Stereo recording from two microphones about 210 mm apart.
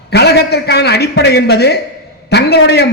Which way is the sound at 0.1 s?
50° left (ahead or behind).